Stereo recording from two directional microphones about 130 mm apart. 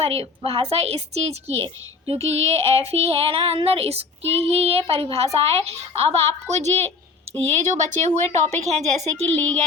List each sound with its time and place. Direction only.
0.0 s a woman's voice: 50° right (ahead or behind)